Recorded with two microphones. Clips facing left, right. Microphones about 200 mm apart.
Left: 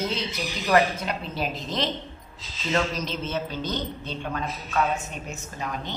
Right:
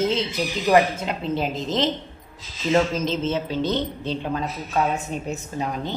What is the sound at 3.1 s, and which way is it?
Speech, 25° right (ahead or behind).